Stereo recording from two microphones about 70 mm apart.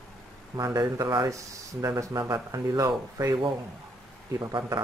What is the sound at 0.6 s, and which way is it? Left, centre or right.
Speech, right.